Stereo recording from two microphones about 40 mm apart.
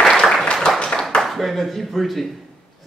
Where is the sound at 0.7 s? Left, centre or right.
Left.